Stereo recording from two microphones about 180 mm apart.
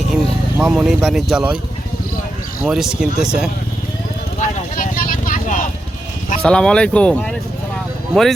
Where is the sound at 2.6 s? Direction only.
Centre (ahead or behind).